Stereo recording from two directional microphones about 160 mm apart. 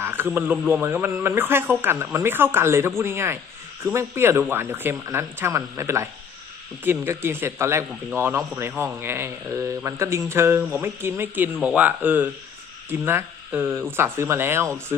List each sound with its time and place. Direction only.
0.3 s speech: 10° right (ahead or behind)